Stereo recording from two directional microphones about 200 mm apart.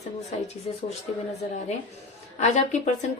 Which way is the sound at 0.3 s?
30° left (ahead or behind).